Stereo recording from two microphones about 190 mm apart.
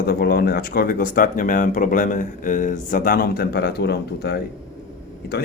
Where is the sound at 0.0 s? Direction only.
55° left (ahead or behind).